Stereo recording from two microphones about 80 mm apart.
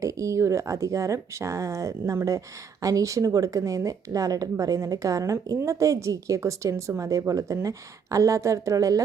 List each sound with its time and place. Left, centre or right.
0.0 s a woman's voice: right